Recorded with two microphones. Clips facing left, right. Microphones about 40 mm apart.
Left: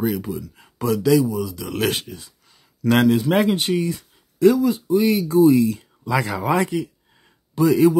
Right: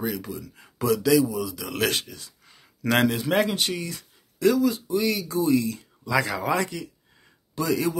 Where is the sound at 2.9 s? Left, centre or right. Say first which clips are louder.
Left 5 dB; centre.